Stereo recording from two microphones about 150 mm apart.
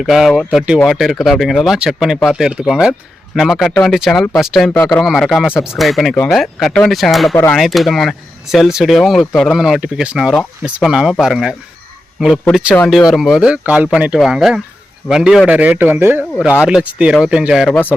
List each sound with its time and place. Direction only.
0.0 s a man's voice: centre (ahead or behind)